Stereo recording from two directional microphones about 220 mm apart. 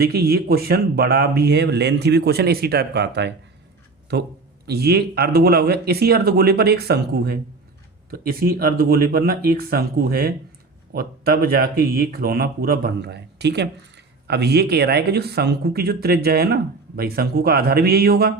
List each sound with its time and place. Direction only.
0.0 s speech: 45° right (ahead or behind)